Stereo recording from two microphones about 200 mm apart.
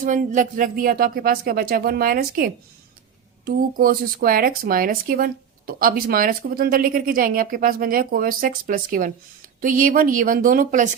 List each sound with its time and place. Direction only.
0.0 s speech: 40° right (ahead or behind)